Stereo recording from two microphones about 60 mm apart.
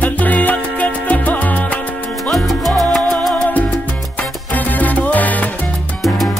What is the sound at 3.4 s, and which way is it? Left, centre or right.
Music, left.